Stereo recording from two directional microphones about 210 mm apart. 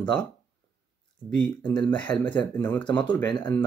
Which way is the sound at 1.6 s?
20° left (ahead or behind).